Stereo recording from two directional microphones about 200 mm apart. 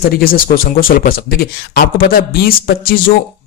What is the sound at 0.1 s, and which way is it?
Speech, 45° left (ahead or behind).